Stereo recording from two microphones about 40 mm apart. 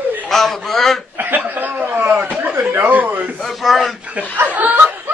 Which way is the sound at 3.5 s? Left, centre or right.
Centre.